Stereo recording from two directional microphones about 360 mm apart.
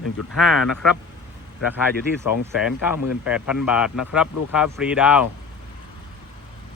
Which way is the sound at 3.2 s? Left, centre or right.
Centre.